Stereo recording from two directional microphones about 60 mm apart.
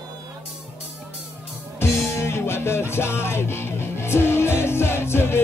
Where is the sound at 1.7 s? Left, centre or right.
Left.